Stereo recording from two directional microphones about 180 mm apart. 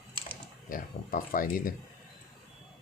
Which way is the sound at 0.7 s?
50° left (ahead or behind).